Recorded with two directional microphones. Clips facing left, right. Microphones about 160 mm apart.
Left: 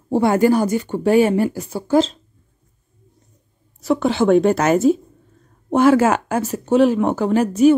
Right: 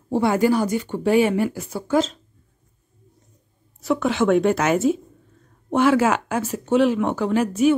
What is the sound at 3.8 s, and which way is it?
Speech, 35° left (ahead or behind).